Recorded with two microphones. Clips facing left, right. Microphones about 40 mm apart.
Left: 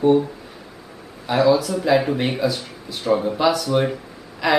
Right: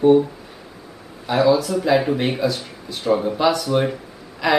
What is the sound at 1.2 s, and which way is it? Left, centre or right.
Speech, centre.